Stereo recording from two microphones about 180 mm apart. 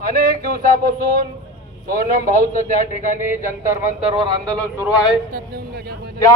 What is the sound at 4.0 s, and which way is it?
Speech, 30° right (ahead or behind).